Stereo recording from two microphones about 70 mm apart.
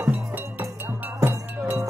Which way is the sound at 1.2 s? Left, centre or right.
Right.